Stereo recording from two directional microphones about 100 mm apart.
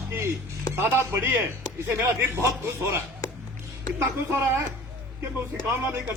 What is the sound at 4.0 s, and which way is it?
Speech, 25° right (ahead or behind).